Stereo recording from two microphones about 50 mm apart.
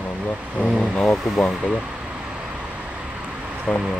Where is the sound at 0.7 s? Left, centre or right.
Left.